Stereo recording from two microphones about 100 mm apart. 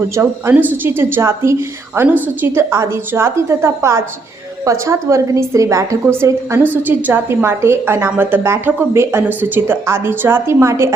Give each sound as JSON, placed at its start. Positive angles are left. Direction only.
{"t": 0.2, "sound": "a woman's voice", "side_deg": -20}